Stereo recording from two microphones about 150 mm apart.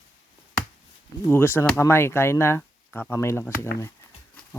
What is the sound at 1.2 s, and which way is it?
Speech, 15° left (ahead or behind).